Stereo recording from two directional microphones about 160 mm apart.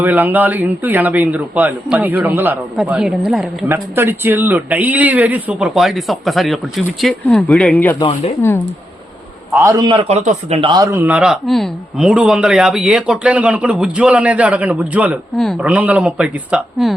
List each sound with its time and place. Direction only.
0.0 s a man's voice: 10° right (ahead or behind)
3.9 s speech: 15° right (ahead or behind); by 8.6 s 15° left (ahead or behind)
9.5 s a man's voice: 20° right (ahead or behind)
9.8 s speech: 35° right (ahead or behind)
10.7 s a man's voice: 20° right (ahead or behind); by 16.9 s 5° right (ahead or behind)